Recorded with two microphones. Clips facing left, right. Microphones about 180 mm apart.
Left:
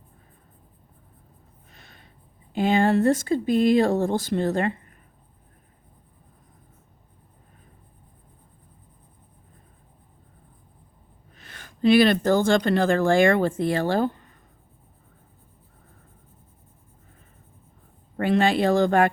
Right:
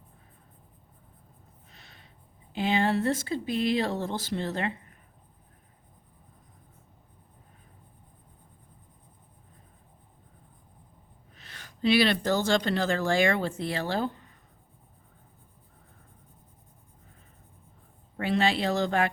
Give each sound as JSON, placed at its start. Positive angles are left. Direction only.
{"t": 1.7, "sound": "a sound", "side_deg": 50}
{"t": 2.5, "sound": "speech", "side_deg": 50}
{"t": 11.3, "sound": "speech", "side_deg": 50}
{"t": 18.2, "sound": "speech", "side_deg": 50}